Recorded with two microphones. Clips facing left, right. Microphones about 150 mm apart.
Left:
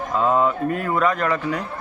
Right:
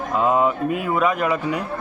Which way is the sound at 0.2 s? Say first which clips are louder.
Even; 10° right (ahead or behind).